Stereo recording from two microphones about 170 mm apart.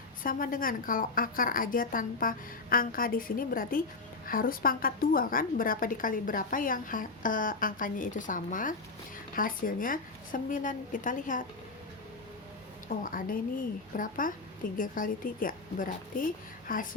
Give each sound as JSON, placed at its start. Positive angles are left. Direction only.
{"t": 0.2, "sound": "a woman's voice", "side_deg": 55}
{"t": 13.0, "sound": "a woman's voice", "side_deg": 55}